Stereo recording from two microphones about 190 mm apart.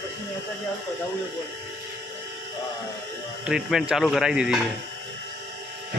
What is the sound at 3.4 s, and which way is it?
Speech, 5° right (ahead or behind).